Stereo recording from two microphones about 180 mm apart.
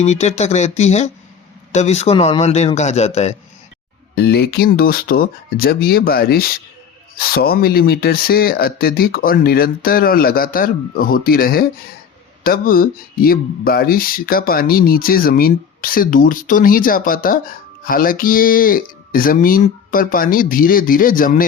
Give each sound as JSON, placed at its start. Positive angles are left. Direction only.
{"t": 0.0, "sound": "a man's voice", "side_deg": 40}
{"t": 4.1, "sound": "speech", "side_deg": 60}